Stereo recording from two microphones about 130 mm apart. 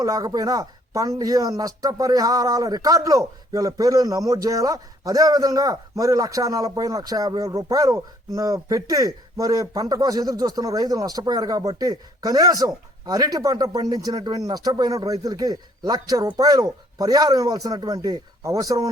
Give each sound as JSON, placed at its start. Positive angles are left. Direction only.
{"t": 0.0, "sound": "speech", "side_deg": -30}